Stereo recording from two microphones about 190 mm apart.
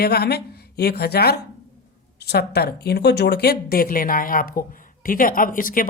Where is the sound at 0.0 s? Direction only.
55° left (ahead or behind).